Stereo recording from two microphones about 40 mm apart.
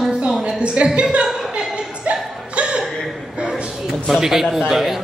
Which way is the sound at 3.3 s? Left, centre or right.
Centre.